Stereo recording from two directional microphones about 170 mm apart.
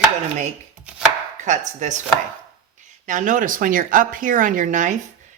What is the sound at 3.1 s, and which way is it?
A woman's voice, 50° right (ahead or behind).